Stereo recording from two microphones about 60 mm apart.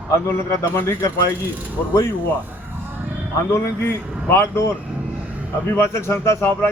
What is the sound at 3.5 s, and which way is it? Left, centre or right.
A man's voice, left.